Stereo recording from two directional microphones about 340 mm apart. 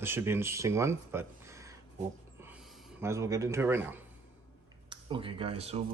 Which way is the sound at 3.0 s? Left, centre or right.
Centre.